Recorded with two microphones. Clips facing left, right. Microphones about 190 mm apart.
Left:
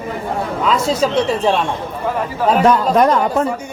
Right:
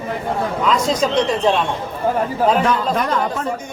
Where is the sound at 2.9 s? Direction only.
40° left (ahead or behind).